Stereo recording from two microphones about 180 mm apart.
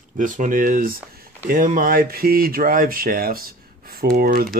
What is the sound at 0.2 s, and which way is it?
Speech, 45° right (ahead or behind).